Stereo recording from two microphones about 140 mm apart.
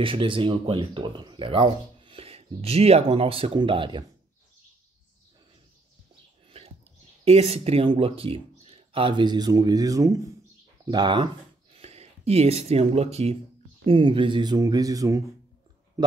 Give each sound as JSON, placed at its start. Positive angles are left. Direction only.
{"t": 0.0, "sound": "speech", "side_deg": -40}
{"t": 7.2, "sound": "speech", "side_deg": -50}
{"t": 11.7, "sound": "speech", "side_deg": -50}